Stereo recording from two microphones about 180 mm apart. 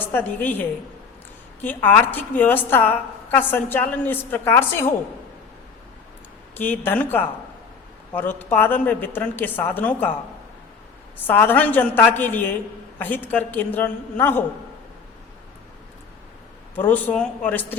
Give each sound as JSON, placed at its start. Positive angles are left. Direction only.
{"t": 0.0, "sound": "a woman's voice", "side_deg": 10}
{"t": 6.6, "sound": "a woman's voice", "side_deg": 10}
{"t": 11.3, "sound": "a woman's voice", "side_deg": 10}
{"t": 16.7, "sound": "a woman's voice", "side_deg": 10}